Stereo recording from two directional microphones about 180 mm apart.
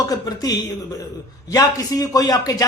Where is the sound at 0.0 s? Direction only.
20° left (ahead or behind).